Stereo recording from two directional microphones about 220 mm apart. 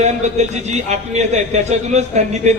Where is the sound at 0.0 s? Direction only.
30° right (ahead or behind).